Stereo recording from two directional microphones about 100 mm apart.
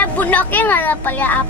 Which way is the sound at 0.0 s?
15° left (ahead or behind).